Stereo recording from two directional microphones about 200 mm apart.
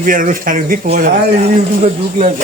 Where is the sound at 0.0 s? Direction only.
40° right (ahead or behind).